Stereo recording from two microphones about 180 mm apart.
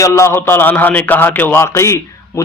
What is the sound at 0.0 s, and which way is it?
A man's voice, 15° left (ahead or behind).